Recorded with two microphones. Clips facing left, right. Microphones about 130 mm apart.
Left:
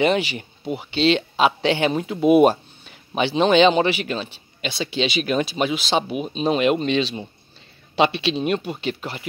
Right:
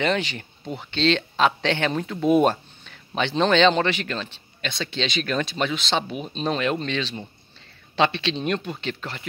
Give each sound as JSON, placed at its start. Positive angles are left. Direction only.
{"t": 0.0, "sound": "a man's voice", "side_deg": 10}